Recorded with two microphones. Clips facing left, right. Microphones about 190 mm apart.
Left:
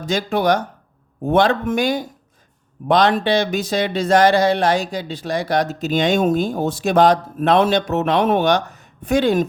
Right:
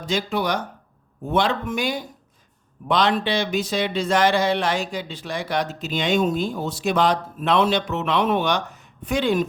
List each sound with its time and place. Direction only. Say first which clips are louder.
0.0 s speech: left 5 dB; 45° left (ahead or behind)